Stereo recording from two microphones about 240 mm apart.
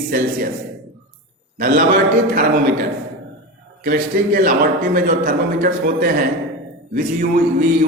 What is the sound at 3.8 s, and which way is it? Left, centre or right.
A man's voice, right.